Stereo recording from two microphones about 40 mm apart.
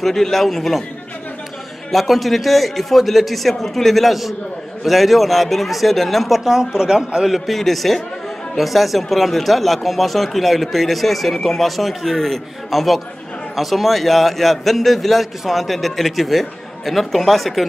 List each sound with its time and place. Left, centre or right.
0.0 s speech: centre
1.9 s speech: centre
6.4 s speech: centre
7.3 s speech: centre